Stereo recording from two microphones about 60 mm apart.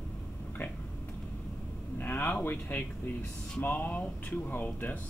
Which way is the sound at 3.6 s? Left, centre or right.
Left.